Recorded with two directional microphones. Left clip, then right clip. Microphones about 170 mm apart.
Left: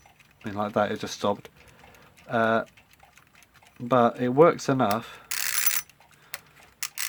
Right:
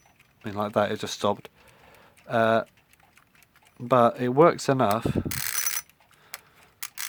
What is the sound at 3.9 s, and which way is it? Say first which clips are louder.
Speech: right 1 dB; 40° right (ahead or behind).